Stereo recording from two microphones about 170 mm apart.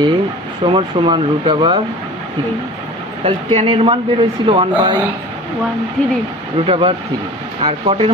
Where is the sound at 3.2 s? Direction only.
35° right (ahead or behind).